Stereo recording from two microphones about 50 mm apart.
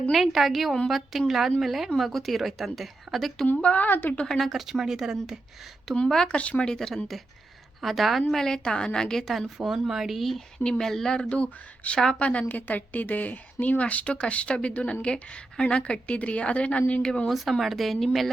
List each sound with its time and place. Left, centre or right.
0.1 s a woman's voice: centre
3.6 s speech: left
3.8 s a woman's voice: left
4.3 s a woman's voice: centre
6.2 s speech: left
6.7 s a woman's voice: centre
9.6 s a woman's voice: centre
10.6 s a woman's voice: centre
12.5 s speech: left
17.2 s a woman's voice: centre